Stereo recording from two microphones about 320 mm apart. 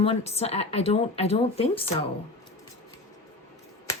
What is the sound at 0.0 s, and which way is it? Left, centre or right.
Speech, centre.